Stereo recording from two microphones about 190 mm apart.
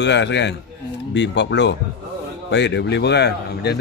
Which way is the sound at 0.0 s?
65° left (ahead or behind).